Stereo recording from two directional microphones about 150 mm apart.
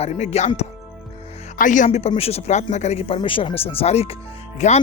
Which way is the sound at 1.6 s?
60° left (ahead or behind).